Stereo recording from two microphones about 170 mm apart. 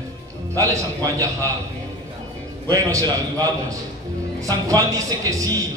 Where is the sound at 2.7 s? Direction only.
20° right (ahead or behind).